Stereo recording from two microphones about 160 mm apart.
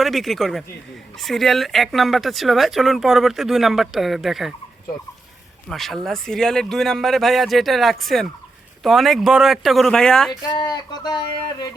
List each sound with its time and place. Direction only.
0.0 s speech: centre (ahead or behind)
5.6 s speech: centre (ahead or behind)
10.4 s speech: 25° left (ahead or behind)